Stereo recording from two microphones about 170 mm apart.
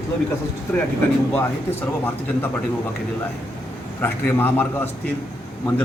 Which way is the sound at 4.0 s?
10° left (ahead or behind).